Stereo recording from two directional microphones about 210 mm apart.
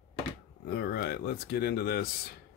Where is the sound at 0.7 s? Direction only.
50° left (ahead or behind).